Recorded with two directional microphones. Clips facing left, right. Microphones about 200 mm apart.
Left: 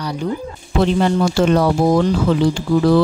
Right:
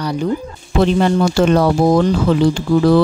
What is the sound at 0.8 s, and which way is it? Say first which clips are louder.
Speech: right 2 dB; 60° right (ahead or behind).